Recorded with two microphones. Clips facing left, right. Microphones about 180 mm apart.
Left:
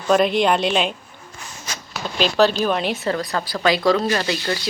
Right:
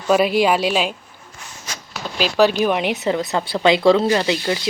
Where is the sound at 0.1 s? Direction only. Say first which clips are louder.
Right 1 dB; 5° right (ahead or behind).